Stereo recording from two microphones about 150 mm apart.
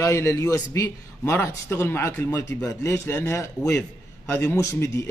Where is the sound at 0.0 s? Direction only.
15° left (ahead or behind).